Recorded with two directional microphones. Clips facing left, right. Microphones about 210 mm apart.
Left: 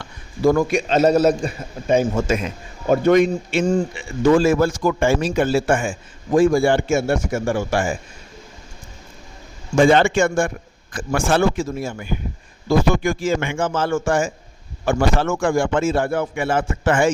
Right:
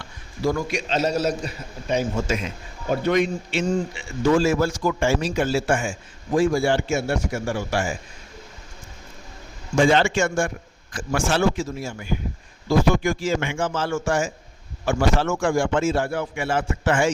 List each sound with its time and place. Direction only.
0.0 s a sound: 55° left (ahead or behind)
0.7 s a man's voice: 50° left (ahead or behind)
9.7 s a man's voice: 55° left (ahead or behind)